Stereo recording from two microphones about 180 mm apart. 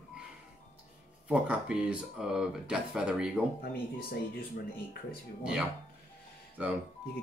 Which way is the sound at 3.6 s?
55° left (ahead or behind).